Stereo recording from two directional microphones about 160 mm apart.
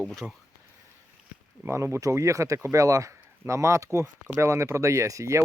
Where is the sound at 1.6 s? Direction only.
15° right (ahead or behind).